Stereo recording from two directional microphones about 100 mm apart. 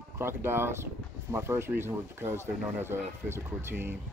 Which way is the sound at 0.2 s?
25° right (ahead or behind).